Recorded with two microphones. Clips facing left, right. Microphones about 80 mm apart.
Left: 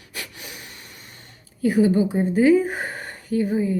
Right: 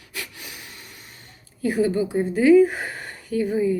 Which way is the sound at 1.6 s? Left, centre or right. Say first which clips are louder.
Left 3 dB; left.